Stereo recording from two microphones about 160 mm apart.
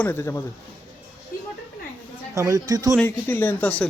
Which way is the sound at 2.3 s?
20° right (ahead or behind).